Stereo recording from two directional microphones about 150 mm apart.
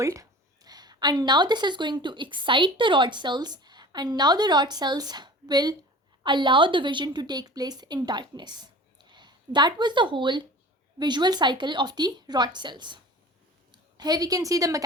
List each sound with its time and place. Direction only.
0.0 s a woman's voice: 20° right (ahead or behind)